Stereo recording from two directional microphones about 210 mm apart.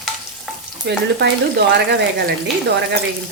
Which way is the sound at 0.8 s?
55° right (ahead or behind).